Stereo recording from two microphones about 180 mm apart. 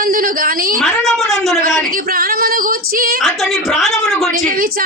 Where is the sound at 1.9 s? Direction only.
55° right (ahead or behind).